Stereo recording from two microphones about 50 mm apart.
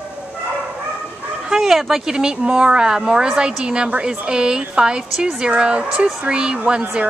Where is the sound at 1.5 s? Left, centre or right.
Centre.